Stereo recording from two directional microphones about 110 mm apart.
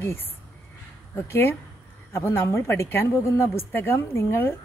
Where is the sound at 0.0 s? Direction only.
20° left (ahead or behind).